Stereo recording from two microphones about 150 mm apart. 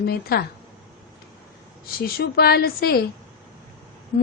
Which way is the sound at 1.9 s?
90° left.